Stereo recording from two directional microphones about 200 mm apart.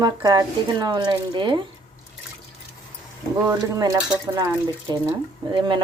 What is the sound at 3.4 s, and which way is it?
Speech, 15° right (ahead or behind).